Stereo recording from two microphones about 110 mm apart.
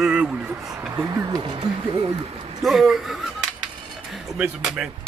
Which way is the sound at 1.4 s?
50° right (ahead or behind).